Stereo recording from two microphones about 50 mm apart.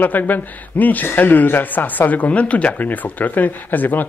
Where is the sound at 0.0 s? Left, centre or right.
Left.